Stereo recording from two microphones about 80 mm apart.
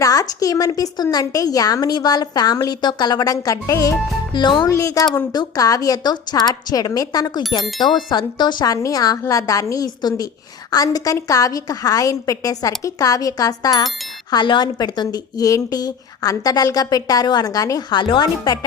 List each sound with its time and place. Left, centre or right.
0.0 s a woman's voice: left
1.1 s a woman's voice: left
4.4 s speech: left
4.8 s a woman's voice: left
7.8 s a woman's voice: left
10.9 s a woman's voice: left
14.3 s a woman's voice: left